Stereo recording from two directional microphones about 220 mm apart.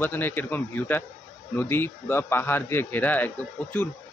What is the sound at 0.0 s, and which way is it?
Speech, 10° left (ahead or behind).